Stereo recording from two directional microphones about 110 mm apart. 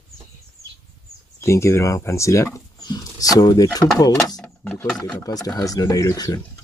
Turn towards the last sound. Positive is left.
turn(degrees=30)  # may be behind; listen again after turning